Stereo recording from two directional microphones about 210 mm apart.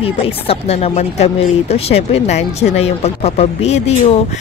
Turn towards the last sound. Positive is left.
turn(degrees=30)  # may be behind; listen again after turning